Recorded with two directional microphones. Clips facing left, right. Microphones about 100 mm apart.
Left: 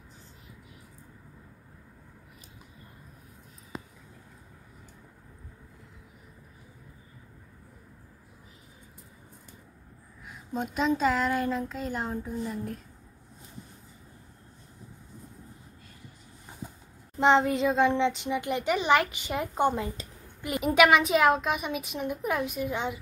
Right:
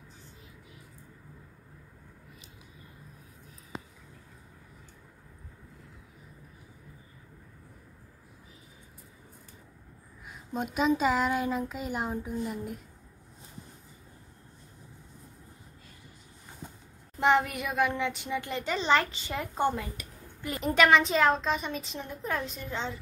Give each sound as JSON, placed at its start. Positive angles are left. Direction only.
{"t": 10.2, "sound": "a child's voice", "side_deg": 0}
{"t": 16.6, "sound": "a sound", "side_deg": 5}
{"t": 17.2, "sound": "a child's voice", "side_deg": 20}